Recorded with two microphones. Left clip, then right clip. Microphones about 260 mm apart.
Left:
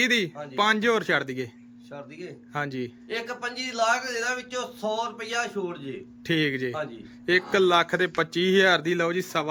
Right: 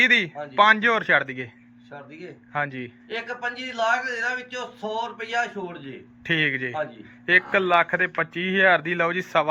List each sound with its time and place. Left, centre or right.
0.0 s speech: centre